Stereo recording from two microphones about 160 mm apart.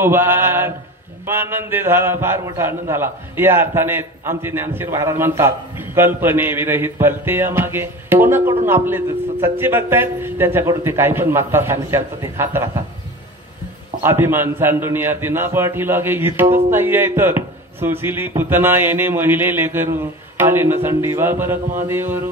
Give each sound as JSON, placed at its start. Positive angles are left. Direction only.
{"t": 0.0, "sound": "a man's voice", "side_deg": -15}
{"t": 14.0, "sound": "a man's voice", "side_deg": -15}